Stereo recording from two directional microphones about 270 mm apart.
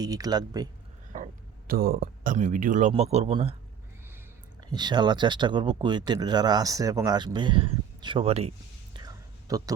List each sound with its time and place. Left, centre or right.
0.0 s speech: centre
1.1 s speech: right
4.7 s speech: centre